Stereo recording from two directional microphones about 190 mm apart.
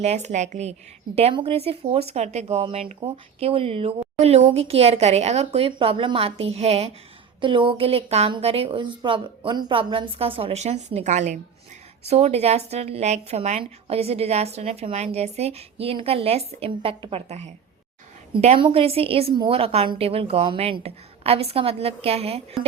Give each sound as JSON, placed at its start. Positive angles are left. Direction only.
{"t": 0.0, "sound": "speech", "side_deg": -35}